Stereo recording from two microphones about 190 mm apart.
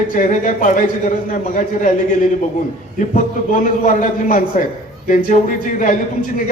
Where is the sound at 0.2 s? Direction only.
40° left (ahead or behind).